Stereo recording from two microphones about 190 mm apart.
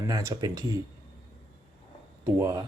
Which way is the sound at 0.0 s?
15° right (ahead or behind).